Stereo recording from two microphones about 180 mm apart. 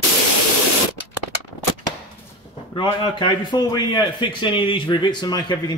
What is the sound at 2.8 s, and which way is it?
A man's voice, 25° left (ahead or behind).